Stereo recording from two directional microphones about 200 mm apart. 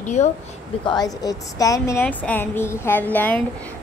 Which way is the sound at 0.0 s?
35° left (ahead or behind).